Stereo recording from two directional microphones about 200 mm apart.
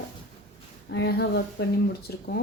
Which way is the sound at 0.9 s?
55° left (ahead or behind).